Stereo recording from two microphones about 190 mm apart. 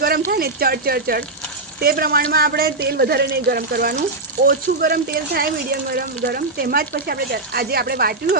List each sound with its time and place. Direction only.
0.3 s speech: 50° right (ahead or behind)